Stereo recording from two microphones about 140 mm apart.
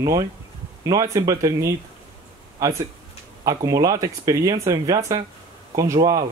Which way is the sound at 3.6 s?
25° right (ahead or behind).